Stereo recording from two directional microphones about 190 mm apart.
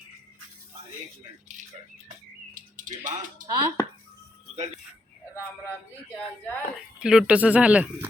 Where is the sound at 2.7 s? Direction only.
45° right (ahead or behind).